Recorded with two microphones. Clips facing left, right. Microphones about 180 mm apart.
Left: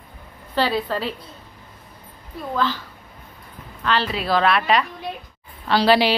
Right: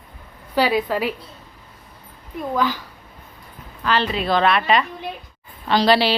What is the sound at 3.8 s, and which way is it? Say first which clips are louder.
A woman's voice: right 2 dB; centre (ahead or behind).